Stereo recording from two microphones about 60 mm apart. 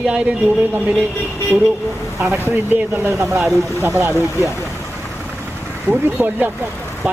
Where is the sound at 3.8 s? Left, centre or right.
Right.